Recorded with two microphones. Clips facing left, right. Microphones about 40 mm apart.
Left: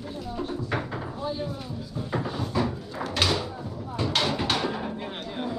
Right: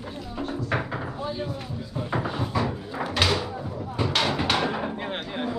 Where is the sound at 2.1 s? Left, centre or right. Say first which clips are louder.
Right 1 dB; right.